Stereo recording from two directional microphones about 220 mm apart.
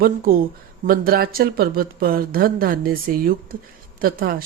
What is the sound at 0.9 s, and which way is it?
Speech, 40° right (ahead or behind).